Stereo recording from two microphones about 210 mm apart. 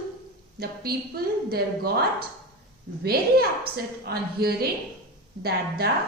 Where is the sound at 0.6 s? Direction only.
45° right (ahead or behind).